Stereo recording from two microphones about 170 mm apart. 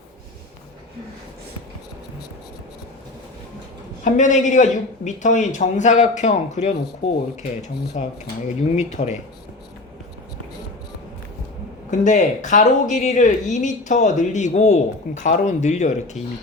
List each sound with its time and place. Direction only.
4.0 s speech: 45° left (ahead or behind)
8.0 s speech: 40° left (ahead or behind)
11.9 s speech: 45° left (ahead or behind)